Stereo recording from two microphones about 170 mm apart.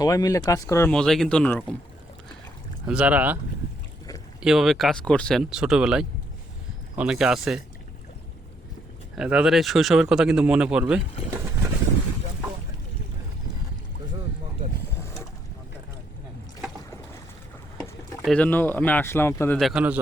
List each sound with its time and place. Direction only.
0.0 s speech: 20° left (ahead or behind)
0.9 s speech: 5° left (ahead or behind)
2.8 s speech: 5° right (ahead or behind)
4.4 s speech: 5° right (ahead or behind)
9.1 s speech: 5° right (ahead or behind)
18.3 s speech: 10° left (ahead or behind)
19.5 s speech: 5° right (ahead or behind)